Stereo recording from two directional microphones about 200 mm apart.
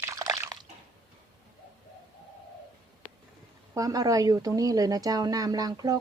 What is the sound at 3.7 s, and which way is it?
Speech, 15° right (ahead or behind).